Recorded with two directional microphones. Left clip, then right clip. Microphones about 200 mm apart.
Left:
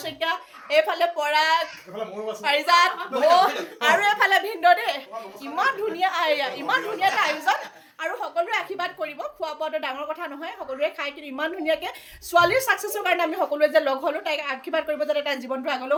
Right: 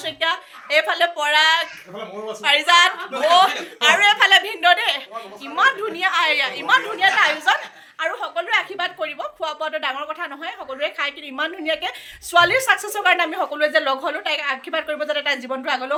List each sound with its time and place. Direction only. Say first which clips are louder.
0.0 s a woman's voice: right 4 dB; centre (ahead or behind); by 6.8 s 20° left (ahead or behind)
7.0 s a woman's voice: right 5 dB; 5° left (ahead or behind)